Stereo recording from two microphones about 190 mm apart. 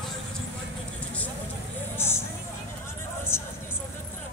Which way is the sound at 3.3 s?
15° left (ahead or behind).